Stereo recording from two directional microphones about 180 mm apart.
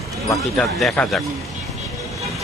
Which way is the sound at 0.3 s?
Centre (ahead or behind).